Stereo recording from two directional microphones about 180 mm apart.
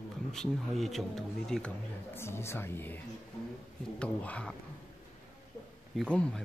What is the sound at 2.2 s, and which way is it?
Speech, 15° left (ahead or behind).